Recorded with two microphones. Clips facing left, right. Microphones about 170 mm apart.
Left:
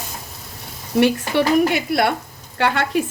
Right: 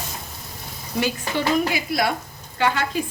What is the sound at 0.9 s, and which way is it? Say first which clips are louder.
Speech: left 8 dB; 70° left (ahead or behind).